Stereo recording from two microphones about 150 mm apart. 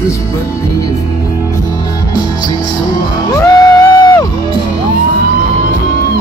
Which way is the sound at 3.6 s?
30° left (ahead or behind).